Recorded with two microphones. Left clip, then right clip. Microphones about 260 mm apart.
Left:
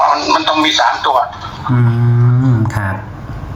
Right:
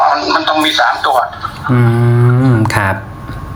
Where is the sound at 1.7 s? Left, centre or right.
Right.